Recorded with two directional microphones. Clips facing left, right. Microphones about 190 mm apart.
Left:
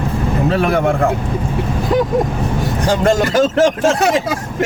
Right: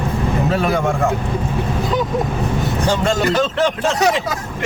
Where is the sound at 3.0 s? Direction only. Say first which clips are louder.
Left 7 dB; 45° left (ahead or behind).